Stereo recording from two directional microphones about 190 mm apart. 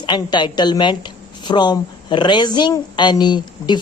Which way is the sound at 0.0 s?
25° left (ahead or behind).